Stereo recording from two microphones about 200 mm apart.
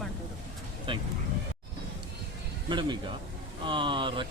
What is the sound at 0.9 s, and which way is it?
Speech, 25° right (ahead or behind).